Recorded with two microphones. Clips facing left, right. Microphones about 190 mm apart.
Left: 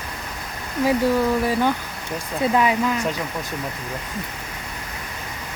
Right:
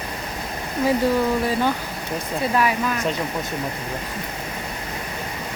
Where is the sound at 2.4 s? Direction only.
20° left (ahead or behind).